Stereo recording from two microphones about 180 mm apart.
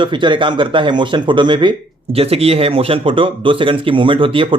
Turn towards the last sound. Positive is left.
turn(degrees=-30)  # may be behind; listen again after turning